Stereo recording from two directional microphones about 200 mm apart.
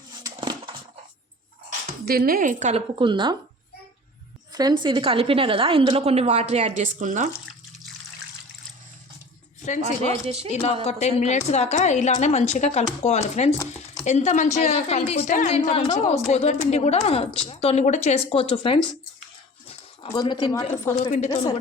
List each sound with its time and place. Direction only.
0.2 s a sound: 20° right (ahead or behind)
2.0 s a woman's voice: 50° right (ahead or behind)
3.0 s a woman's voice: 25° right (ahead or behind)
4.5 s a woman's voice: 20° right (ahead or behind); by 7.3 s 40° right (ahead or behind)
9.8 s a woman's voice: 30° right (ahead or behind)
10.8 s a woman's voice: 35° left (ahead or behind)
20.1 s speech: 20° left (ahead or behind)
21.1 s speech: 30° left (ahead or behind)